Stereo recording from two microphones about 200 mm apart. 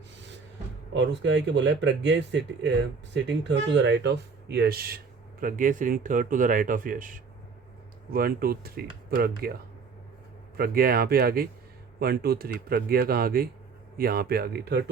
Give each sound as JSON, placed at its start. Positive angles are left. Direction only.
{"t": 0.9, "sound": "speech", "side_deg": -65}
{"t": 10.6, "sound": "speech", "side_deg": -50}